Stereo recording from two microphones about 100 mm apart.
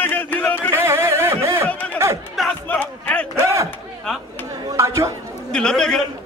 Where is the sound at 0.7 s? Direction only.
25° right (ahead or behind).